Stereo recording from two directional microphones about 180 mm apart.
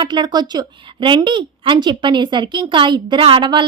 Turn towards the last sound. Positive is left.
turn(degrees=-25)  # may be behind; listen again after turning